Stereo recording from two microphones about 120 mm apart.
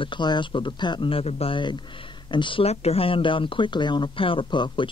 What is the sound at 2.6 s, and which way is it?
Speech, 60° left (ahead or behind).